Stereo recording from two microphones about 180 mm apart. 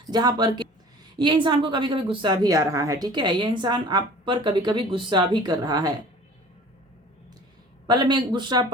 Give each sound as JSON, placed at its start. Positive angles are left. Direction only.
{"t": 0.1, "sound": "a woman's voice", "side_deg": -25}
{"t": 7.9, "sound": "a woman's voice", "side_deg": -25}